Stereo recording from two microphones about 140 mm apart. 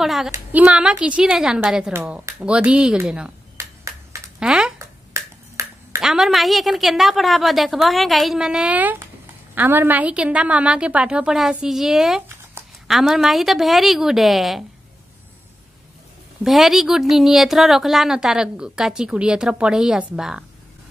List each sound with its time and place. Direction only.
0.0 s a woman's voice: centre (ahead or behind)
3.5 s finger snapping: 20° right (ahead or behind)
4.4 s a sound: 5° right (ahead or behind)
4.7 s finger snapping: 20° right (ahead or behind)
6.0 s a woman's voice: 5° right (ahead or behind)
16.4 s a woman's voice: centre (ahead or behind)